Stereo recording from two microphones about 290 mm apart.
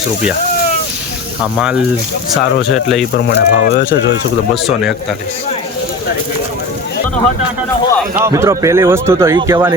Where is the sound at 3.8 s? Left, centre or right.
Left.